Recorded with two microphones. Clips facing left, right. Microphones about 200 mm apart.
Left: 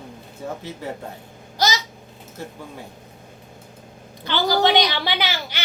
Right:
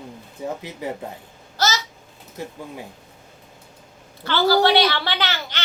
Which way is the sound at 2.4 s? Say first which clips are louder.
Right 2 dB; 15° right (ahead or behind).